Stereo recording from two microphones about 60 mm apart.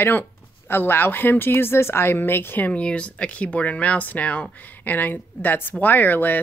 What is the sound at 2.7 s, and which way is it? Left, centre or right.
Speech, centre.